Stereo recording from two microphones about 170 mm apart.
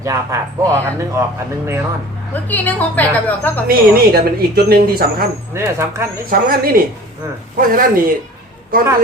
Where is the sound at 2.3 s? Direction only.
10° left (ahead or behind).